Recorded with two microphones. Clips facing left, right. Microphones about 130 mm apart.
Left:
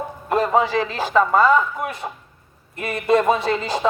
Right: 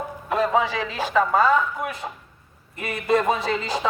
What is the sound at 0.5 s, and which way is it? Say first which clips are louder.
A man's voice: left 4 dB; 40° left (ahead or behind).